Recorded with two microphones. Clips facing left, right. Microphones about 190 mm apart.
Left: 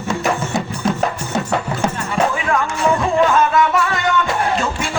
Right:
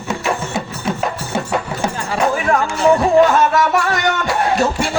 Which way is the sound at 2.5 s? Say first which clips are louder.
Right 4 dB; 35° right (ahead or behind).